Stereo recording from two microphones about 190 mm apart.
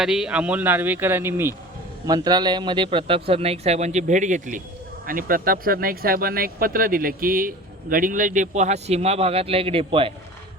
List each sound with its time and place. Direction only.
0.0 s speech: 5° right (ahead or behind); by 10.1 s 30° right (ahead or behind)